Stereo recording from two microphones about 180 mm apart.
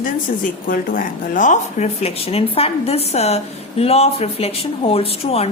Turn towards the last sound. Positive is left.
turn(degrees=35)  # may be behind; listen again after turning